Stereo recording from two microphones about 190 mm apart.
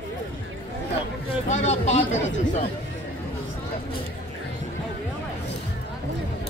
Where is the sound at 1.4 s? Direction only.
35° left (ahead or behind).